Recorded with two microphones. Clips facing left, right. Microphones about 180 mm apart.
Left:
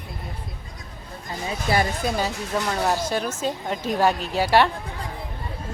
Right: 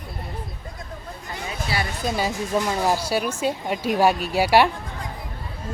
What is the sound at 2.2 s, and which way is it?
Speech, 15° right (ahead or behind).